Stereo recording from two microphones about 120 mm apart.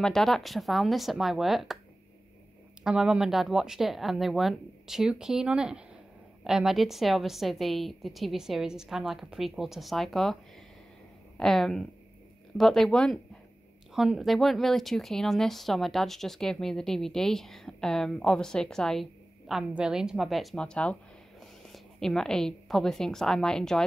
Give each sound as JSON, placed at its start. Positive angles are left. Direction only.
{"t": 0.0, "sound": "speech", "side_deg": 5}
{"t": 2.8, "sound": "speech", "side_deg": -5}
{"t": 11.3, "sound": "speech", "side_deg": 5}